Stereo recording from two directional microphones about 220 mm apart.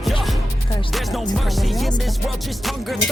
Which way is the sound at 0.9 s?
Centre (ahead or behind).